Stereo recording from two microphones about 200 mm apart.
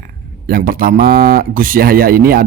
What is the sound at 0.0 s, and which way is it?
Speech, 45° right (ahead or behind).